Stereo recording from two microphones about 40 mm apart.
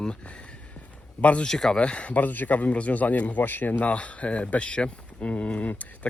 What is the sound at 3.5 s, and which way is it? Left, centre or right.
Speech, left.